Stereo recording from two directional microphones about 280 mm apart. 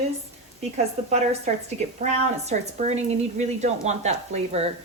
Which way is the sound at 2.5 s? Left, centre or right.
Right.